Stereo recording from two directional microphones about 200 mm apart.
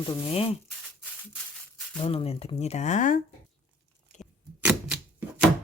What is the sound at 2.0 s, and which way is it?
Speech, 30° left (ahead or behind).